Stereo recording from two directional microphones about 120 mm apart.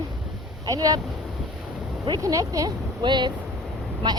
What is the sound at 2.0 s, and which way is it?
A woman's voice, 30° right (ahead or behind).